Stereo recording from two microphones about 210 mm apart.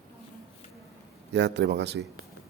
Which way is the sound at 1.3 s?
55° right (ahead or behind).